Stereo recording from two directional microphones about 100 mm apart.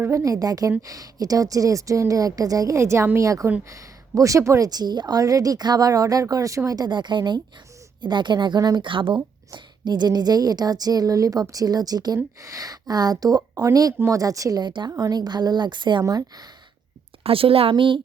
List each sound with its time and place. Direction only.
0.0 s a woman's voice: 30° right (ahead or behind); by 16.0 s 50° right (ahead or behind)
17.2 s speech: 70° right (ahead or behind)